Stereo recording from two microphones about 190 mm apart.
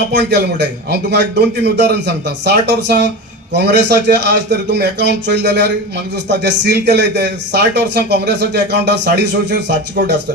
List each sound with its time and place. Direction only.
0.1 s speech: 65° right (ahead or behind)